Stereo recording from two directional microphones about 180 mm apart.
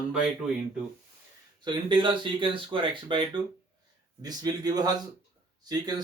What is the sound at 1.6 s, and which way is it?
Speech, 25° right (ahead or behind).